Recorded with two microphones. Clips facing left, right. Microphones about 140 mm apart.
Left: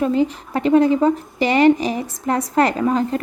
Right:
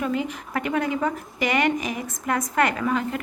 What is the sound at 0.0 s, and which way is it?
A woman's voice, 30° left (ahead or behind).